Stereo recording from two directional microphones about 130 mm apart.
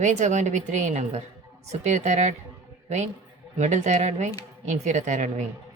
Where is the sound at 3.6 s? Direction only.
65° right (ahead or behind).